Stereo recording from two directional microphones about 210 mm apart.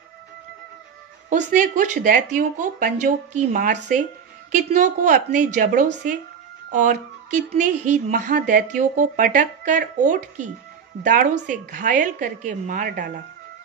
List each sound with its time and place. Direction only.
1.3 s a woman's voice: 35° right (ahead or behind)
4.5 s a woman's voice: 35° right (ahead or behind)